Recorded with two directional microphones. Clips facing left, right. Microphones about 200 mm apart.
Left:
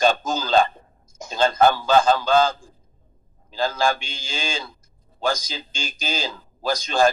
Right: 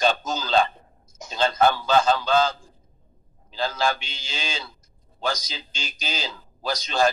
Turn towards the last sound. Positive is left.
turn(degrees=50)  # may be behind; listen again after turning